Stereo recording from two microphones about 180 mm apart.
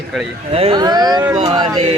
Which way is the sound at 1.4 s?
35° right (ahead or behind).